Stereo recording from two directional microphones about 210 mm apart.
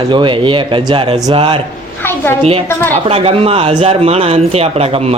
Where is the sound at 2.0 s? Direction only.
10° left (ahead or behind).